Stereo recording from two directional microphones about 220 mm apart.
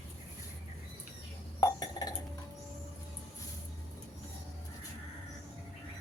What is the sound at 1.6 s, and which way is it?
Chink, 15° left (ahead or behind).